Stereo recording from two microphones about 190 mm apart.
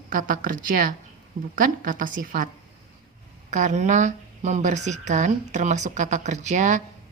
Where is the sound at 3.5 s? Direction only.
40° right (ahead or behind).